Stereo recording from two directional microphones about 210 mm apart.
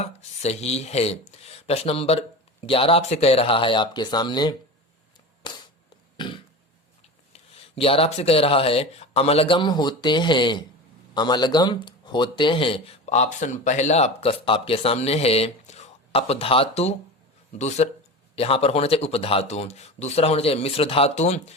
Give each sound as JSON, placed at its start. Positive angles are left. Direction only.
{"t": 0.0, "sound": "speech", "side_deg": 30}
{"t": 5.4, "sound": "a sound", "side_deg": 20}
{"t": 7.3, "sound": "speech", "side_deg": 25}